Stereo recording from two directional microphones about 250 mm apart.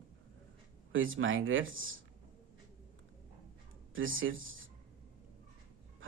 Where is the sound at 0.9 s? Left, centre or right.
Right.